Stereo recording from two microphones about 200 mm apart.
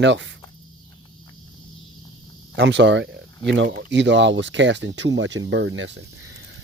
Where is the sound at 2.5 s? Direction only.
65° right (ahead or behind).